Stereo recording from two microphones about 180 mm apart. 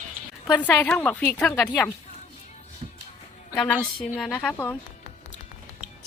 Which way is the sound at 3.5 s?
5° left (ahead or behind).